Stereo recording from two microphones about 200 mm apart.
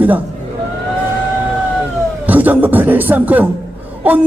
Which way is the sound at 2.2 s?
10° right (ahead or behind).